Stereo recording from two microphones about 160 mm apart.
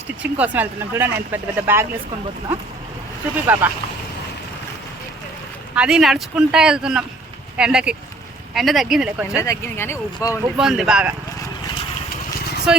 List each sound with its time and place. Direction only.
0.2 s speech: 10° right (ahead or behind)
3.4 s speech: 10° right (ahead or behind)
5.7 s speech: 5° right (ahead or behind)
9.4 s speech: 15° left (ahead or behind)
10.6 s speech: 5° right (ahead or behind)
12.7 s speech: 5° right (ahead or behind)